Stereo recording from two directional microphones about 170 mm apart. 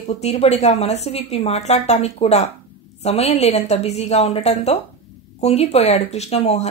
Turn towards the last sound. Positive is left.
turn(degrees=35)  # may be behind; listen again after turning